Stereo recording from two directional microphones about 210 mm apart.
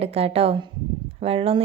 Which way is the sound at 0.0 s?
30° right (ahead or behind).